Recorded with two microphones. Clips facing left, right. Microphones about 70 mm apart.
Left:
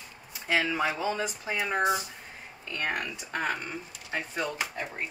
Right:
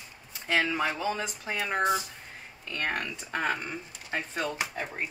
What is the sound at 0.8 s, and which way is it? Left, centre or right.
Speech, centre.